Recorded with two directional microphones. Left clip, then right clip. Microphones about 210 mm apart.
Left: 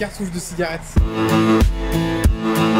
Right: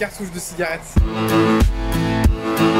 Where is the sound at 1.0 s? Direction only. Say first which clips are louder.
Even; centre (ahead or behind).